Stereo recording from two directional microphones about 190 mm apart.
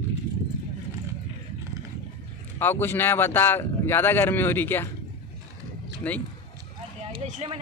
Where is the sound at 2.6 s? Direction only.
10° left (ahead or behind).